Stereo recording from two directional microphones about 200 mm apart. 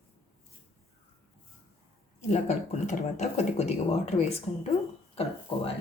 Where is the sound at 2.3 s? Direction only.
35° left (ahead or behind).